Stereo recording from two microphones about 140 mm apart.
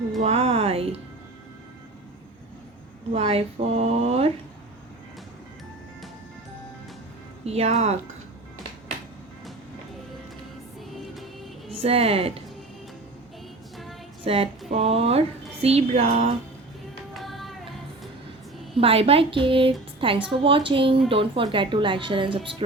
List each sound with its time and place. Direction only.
0.2 s speech: 45° right (ahead or behind)
3.1 s speech: 45° right (ahead or behind)
7.4 s speech: 50° right (ahead or behind)
10.9 s music: centre (ahead or behind)
11.7 s a woman's voice: 45° right (ahead or behind)
14.3 s speech: 45° right (ahead or behind)
17.2 s music: centre (ahead or behind)
18.8 s a woman's voice: 45° right (ahead or behind)